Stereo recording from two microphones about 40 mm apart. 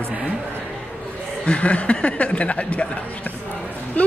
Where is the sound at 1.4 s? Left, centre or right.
Left.